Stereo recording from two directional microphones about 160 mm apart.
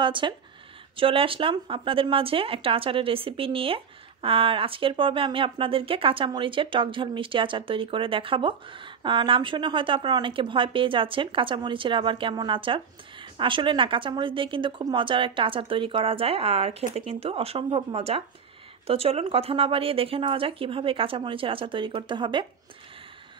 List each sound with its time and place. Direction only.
0.0 s a woman's voice: 30° right (ahead or behind)